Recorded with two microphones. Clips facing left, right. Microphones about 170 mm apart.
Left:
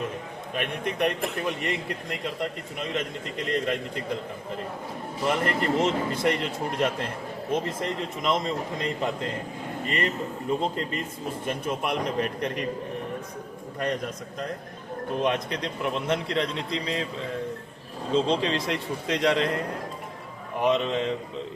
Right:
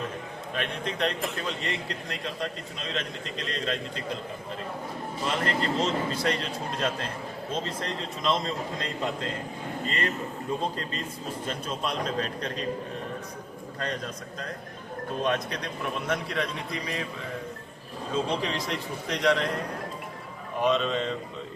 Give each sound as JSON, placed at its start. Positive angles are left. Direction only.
{"t": 0.5, "sound": "a man's voice", "side_deg": 15}
{"t": 3.5, "sound": "a man's voice", "side_deg": 15}
{"t": 5.2, "sound": "a man's voice", "side_deg": 15}
{"t": 10.6, "sound": "a man's voice", "side_deg": 20}
{"t": 13.7, "sound": "a man's voice", "side_deg": 20}
{"t": 18.1, "sound": "a man's voice", "side_deg": 20}
{"t": 18.5, "sound": "a man's voice", "side_deg": 60}
{"t": 19.0, "sound": "a man's voice", "side_deg": 20}
{"t": 20.6, "sound": "a man's voice", "side_deg": 15}